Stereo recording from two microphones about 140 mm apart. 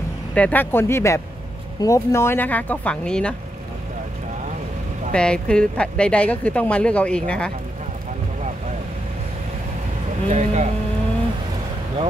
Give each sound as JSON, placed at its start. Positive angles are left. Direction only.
{"t": 0.3, "sound": "speech", "side_deg": 10}
{"t": 5.1, "sound": "speech", "side_deg": 5}
{"t": 10.2, "sound": "speech", "side_deg": -55}